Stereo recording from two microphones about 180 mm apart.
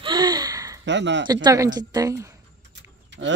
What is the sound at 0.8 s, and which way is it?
Speech, 80° right.